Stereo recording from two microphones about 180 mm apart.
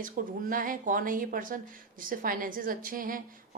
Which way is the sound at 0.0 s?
50° right (ahead or behind).